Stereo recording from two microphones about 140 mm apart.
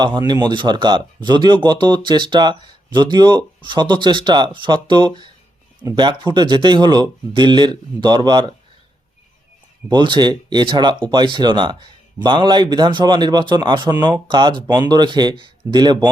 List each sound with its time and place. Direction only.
0.0 s speech: 30° right (ahead or behind)
9.9 s speech: 35° right (ahead or behind)